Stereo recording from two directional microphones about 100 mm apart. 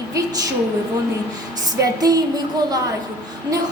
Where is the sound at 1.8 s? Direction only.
40° right (ahead or behind).